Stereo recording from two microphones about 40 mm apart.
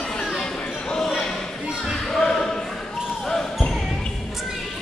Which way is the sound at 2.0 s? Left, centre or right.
Centre.